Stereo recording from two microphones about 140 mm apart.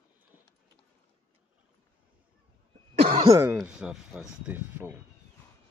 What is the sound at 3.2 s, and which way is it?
Speech, 25° right (ahead or behind).